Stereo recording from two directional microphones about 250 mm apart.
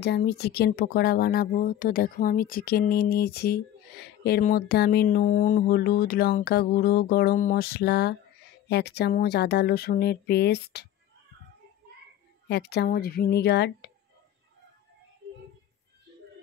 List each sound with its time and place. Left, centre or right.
0.0 s speech: left
12.4 s speech: left